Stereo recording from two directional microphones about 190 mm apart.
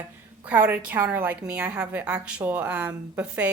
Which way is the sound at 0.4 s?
10° right (ahead or behind).